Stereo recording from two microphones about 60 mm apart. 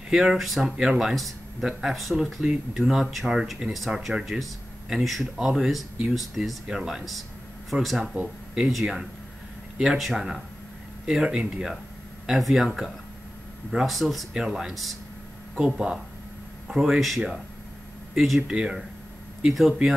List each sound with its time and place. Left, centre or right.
0.1 s speech: centre
8.0 s speech: right
8.5 s speech: centre
12.3 s speech: centre
18.1 s speech: centre